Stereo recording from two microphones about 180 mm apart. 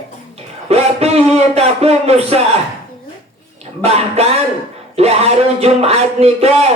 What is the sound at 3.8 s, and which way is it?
Music, 35° right (ahead or behind).